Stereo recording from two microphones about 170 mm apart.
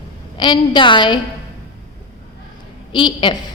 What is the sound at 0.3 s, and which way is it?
Speech, 25° left (ahead or behind).